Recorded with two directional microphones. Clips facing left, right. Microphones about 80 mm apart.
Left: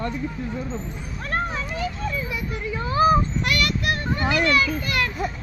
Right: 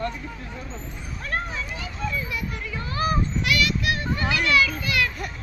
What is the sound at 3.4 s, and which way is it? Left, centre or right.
Child singing, left.